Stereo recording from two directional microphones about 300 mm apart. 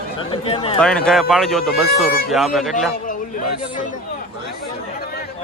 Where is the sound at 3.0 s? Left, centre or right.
Left.